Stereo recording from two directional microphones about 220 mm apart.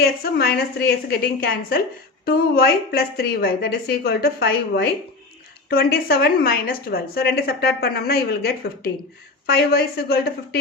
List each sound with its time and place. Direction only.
0.0 s a woman's voice: 45° left (ahead or behind)